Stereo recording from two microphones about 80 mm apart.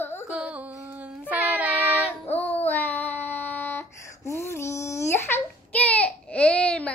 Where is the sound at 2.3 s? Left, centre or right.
Left.